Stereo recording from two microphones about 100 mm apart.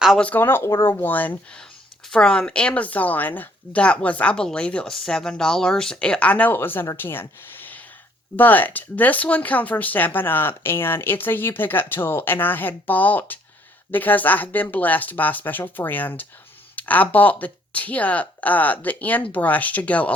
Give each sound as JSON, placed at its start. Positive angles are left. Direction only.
{"t": 0.2, "sound": "speech", "side_deg": 15}